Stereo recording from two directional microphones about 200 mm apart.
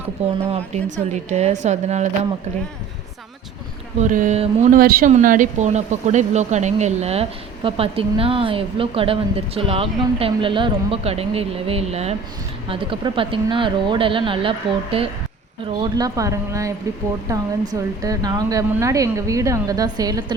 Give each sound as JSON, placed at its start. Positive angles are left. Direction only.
{"t": 0.5, "sound": "speech", "side_deg": -35}
{"t": 3.9, "sound": "speech", "side_deg": -40}